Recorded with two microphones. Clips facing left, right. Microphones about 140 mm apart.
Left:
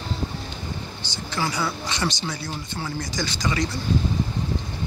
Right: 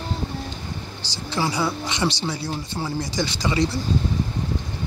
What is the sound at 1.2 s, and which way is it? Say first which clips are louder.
Speech: right 3 dB; 30° right (ahead or behind).